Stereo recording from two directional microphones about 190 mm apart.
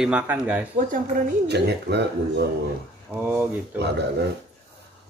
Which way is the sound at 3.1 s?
10° right (ahead or behind).